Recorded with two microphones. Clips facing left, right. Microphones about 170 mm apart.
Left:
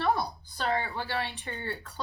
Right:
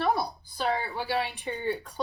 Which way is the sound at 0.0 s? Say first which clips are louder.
Right 1 dB; 10° right (ahead or behind).